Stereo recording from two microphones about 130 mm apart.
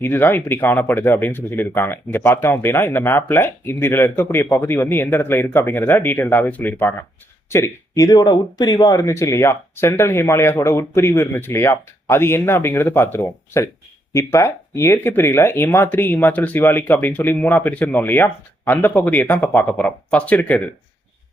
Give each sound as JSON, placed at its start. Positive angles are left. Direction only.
{"t": 0.0, "sound": "speech", "side_deg": 15}